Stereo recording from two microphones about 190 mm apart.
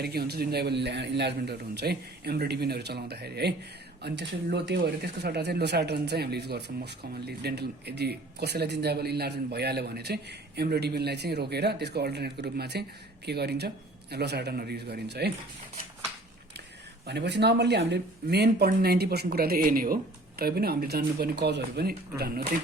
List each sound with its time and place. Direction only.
0.0 s speech: 55° right (ahead or behind)
17.1 s speech: 65° right (ahead or behind)